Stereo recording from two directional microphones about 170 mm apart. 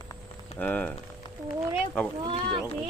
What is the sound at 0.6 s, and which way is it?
Speech, 10° left (ahead or behind).